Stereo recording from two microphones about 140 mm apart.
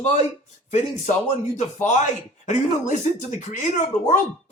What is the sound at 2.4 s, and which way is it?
Speech, 60° left (ahead or behind).